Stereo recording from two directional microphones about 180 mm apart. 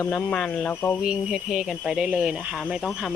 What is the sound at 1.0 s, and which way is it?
Speech, 5° right (ahead or behind).